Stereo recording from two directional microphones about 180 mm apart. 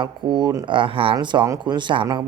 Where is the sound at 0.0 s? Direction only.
25° right (ahead or behind).